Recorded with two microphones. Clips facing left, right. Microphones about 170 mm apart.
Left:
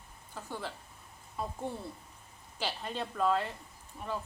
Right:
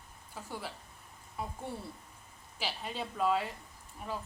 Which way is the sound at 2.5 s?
10° right (ahead or behind).